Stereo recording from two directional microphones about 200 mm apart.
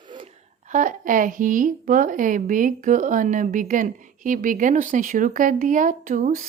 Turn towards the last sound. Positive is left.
turn(degrees=-40)  # may be behind; listen again after turning